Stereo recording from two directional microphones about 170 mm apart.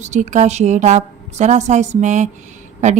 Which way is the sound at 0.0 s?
45° right (ahead or behind).